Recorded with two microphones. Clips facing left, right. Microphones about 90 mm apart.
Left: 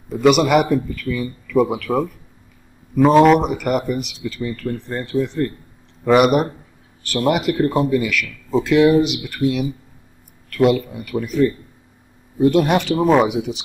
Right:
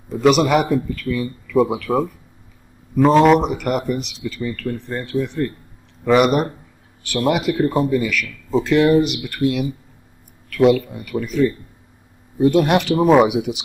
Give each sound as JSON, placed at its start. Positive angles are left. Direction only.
{"t": 0.1, "sound": "speech", "side_deg": 0}
{"t": 1.0, "sound": "speech", "side_deg": -15}
{"t": 1.8, "sound": "speech", "side_deg": -5}
{"t": 5.0, "sound": "speech", "side_deg": 25}
{"t": 6.0, "sound": "speech", "side_deg": 5}